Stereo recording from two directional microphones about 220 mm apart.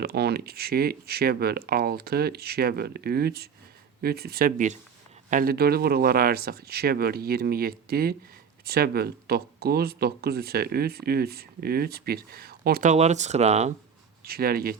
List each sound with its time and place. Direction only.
0.0 s speech: 45° right (ahead or behind); by 13.7 s 30° right (ahead or behind)
14.3 s speech: 45° right (ahead or behind)